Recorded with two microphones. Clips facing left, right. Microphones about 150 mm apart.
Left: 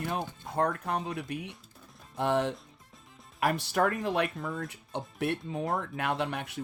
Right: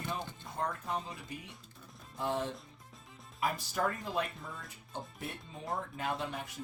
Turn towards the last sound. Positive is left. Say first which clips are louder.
# left 6 dB
turn(degrees=70)  # may be behind; listen again after turning